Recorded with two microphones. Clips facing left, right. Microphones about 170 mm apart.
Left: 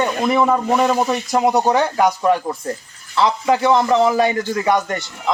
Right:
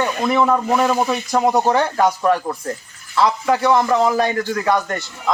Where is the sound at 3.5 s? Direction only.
20° left (ahead or behind).